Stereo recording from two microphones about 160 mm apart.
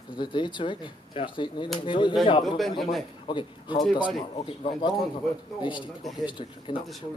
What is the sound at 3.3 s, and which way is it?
Speech, 30° left (ahead or behind).